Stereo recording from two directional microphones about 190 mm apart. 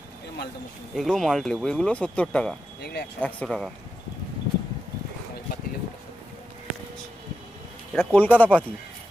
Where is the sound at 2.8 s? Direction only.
60° left (ahead or behind).